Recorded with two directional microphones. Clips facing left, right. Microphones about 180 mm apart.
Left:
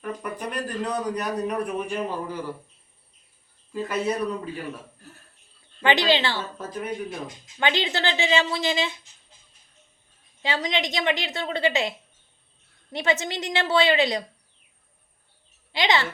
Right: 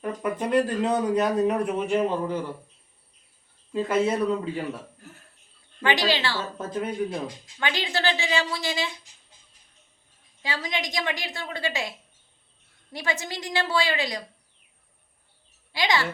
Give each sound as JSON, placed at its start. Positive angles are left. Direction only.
{"t": 0.0, "sound": "speech", "side_deg": -25}
{"t": 3.7, "sound": "speech", "side_deg": -25}
{"t": 5.8, "sound": "a woman's voice", "side_deg": 25}
{"t": 6.6, "sound": "speech", "side_deg": -25}
{"t": 7.4, "sound": "a woman's voice", "side_deg": 25}
{"t": 10.4, "sound": "a woman's voice", "side_deg": 25}
{"t": 15.7, "sound": "a woman's voice", "side_deg": 20}